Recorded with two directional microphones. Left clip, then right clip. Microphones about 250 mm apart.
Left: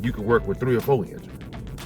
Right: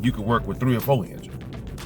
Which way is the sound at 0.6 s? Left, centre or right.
Centre.